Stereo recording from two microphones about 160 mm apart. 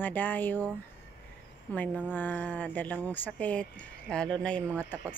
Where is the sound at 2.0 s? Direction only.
10° left (ahead or behind).